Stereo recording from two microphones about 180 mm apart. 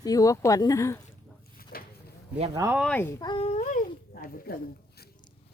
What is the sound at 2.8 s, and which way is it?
Speech, 5° left (ahead or behind).